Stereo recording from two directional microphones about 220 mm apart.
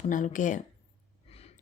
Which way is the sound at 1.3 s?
25° left (ahead or behind).